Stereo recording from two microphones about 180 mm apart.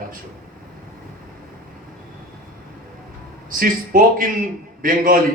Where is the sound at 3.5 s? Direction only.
50° right (ahead or behind).